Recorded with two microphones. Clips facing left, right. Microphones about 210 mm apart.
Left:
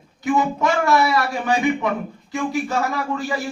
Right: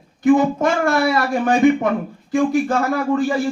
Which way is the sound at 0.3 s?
55° right (ahead or behind).